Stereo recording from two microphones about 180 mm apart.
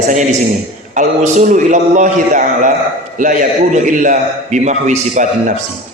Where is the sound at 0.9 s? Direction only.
45° right (ahead or behind).